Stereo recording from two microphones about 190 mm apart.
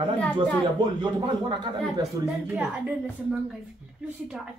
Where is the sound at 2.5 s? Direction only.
10° right (ahead or behind).